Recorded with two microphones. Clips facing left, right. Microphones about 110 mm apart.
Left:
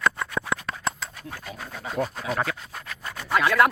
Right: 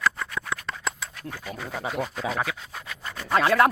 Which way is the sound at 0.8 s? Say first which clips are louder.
Left 2 dB; 15° left (ahead or behind).